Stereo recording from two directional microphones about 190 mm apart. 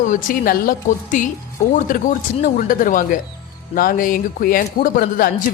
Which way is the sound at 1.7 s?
45° left (ahead or behind).